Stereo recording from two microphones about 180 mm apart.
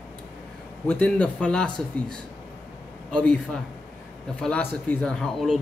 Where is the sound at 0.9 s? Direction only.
5° left (ahead or behind).